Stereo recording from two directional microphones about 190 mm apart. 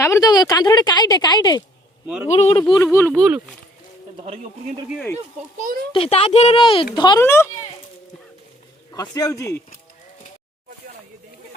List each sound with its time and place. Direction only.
0.0 s speech: 20° left (ahead or behind)
2.3 s speech: 35° left (ahead or behind)
2.6 s speech: 20° left (ahead or behind)
3.1 s speech: 5° right (ahead or behind)
5.1 s a child's voice: 45° right (ahead or behind)
5.9 s speech: 30° left (ahead or behind); by 7.5 s 15° left (ahead or behind)
8.9 s speech: 20° left (ahead or behind)